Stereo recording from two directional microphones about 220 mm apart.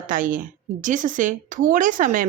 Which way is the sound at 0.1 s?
40° right (ahead or behind).